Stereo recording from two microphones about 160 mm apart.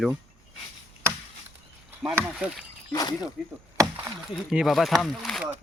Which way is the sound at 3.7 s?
25° right (ahead or behind).